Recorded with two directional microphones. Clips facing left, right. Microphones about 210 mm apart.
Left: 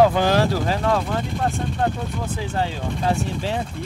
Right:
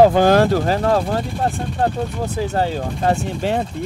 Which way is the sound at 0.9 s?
35° right (ahead or behind).